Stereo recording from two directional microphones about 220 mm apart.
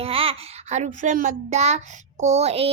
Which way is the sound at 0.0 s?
25° right (ahead or behind).